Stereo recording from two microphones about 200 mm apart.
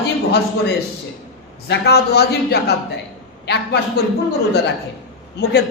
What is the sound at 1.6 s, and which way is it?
A woman's voice, 55° left (ahead or behind).